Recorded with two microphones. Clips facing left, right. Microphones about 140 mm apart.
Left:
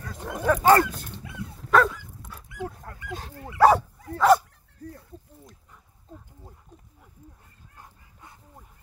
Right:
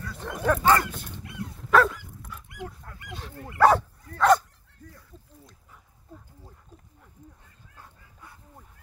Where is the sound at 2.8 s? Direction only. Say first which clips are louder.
Left 4 dB; 45° left (ahead or behind).